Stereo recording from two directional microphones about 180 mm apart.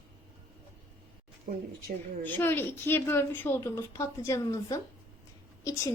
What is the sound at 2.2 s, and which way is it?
A woman's voice, 10° left (ahead or behind).